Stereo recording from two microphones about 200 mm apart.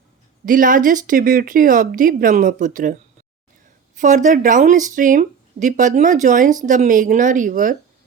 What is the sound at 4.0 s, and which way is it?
Speech, 40° right (ahead or behind).